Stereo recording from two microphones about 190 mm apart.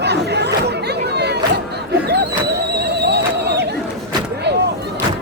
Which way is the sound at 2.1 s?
60° right (ahead or behind).